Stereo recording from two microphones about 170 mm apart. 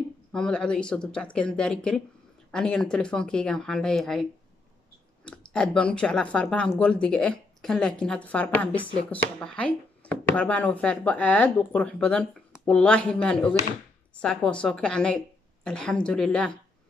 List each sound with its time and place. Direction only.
0.3 s a woman's voice: 5° left (ahead or behind)